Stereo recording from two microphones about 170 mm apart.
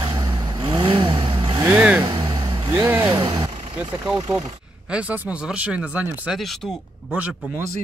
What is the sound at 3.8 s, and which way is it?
Speech, 15° right (ahead or behind).